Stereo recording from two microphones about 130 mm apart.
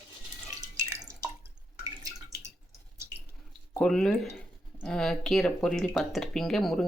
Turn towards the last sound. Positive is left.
turn(degrees=0)  # may be behind; listen again after turning